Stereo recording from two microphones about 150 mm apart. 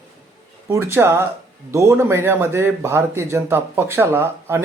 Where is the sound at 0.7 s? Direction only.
15° right (ahead or behind).